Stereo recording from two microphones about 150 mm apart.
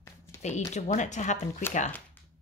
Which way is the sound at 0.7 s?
50° left (ahead or behind).